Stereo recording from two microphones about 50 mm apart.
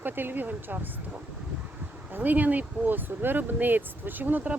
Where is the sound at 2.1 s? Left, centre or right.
Right.